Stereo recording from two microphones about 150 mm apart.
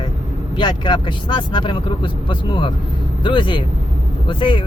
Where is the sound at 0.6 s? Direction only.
30° left (ahead or behind).